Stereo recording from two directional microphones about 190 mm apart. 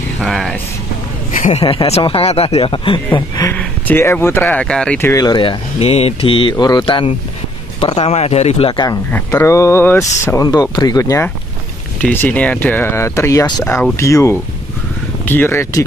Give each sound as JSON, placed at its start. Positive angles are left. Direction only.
{"t": 0.2, "sound": "speech", "side_deg": 0}
{"t": 1.4, "sound": "speech", "side_deg": 30}
{"t": 3.5, "sound": "speech", "side_deg": 10}
{"t": 9.1, "sound": "speech", "side_deg": 15}